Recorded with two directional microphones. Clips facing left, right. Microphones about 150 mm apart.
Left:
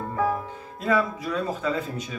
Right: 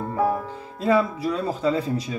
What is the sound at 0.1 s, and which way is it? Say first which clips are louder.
Speech: right 2 dB; 30° right (ahead or behind).